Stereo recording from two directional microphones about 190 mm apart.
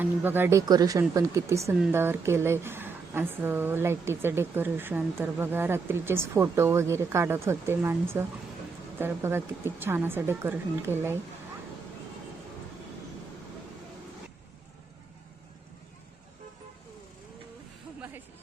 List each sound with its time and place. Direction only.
0.0 s a woman's voice: 10° right (ahead or behind)